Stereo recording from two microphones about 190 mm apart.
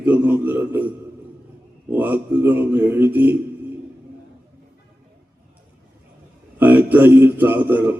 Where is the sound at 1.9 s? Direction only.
10° right (ahead or behind).